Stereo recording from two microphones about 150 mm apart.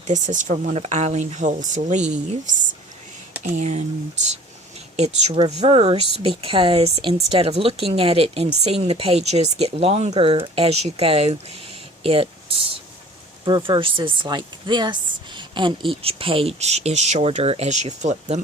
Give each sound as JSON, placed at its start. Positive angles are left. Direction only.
{"t": 0.1, "sound": "speech", "side_deg": -55}
{"t": 3.4, "sound": "speech", "side_deg": -50}